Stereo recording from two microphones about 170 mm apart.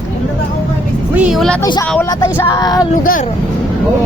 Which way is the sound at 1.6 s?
25° left (ahead or behind).